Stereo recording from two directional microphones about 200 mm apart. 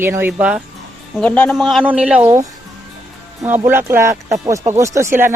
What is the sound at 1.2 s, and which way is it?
Speech, 5° left (ahead or behind).